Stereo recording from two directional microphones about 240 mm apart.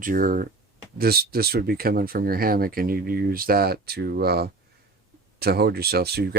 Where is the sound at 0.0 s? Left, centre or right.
Right.